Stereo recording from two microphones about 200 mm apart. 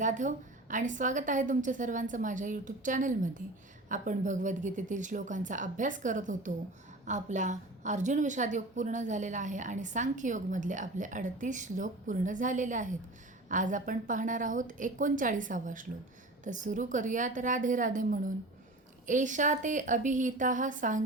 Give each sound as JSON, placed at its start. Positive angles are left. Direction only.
{"t": 0.0, "sound": "a woman's voice", "side_deg": -40}